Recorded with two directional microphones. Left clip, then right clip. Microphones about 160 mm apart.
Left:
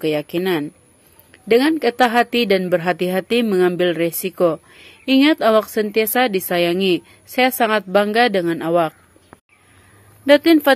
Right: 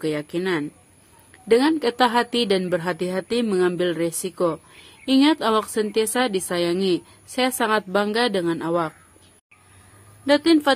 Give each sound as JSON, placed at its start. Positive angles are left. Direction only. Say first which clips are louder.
{"t": 0.0, "sound": "speech", "louder": "left 5 dB", "side_deg": 15}
{"t": 10.2, "sound": "speech", "louder": "left 5 dB", "side_deg": 15}